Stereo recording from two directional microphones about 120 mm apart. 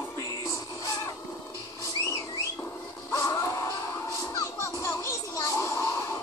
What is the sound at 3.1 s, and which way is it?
Music, 25° left (ahead or behind).